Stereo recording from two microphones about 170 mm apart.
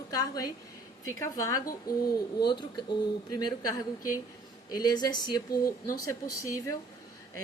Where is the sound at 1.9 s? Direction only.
60° left (ahead or behind).